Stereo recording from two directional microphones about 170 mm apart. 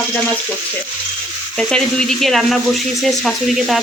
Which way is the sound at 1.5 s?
5° left (ahead or behind).